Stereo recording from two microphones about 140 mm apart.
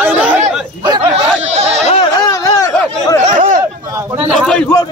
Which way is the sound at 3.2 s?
65° right (ahead or behind).